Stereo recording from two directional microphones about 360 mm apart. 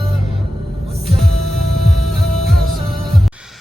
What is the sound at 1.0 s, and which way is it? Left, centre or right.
Music, centre.